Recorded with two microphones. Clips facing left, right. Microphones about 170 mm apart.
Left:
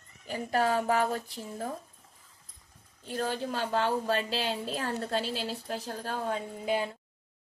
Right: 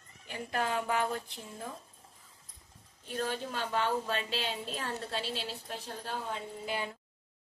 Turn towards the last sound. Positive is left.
turn(degrees=50)  # may be behind; listen again after turning